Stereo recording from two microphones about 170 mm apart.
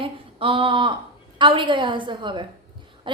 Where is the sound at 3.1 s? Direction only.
30° right (ahead or behind).